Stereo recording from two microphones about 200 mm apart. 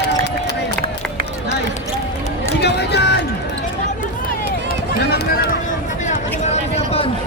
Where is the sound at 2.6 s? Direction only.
55° left (ahead or behind).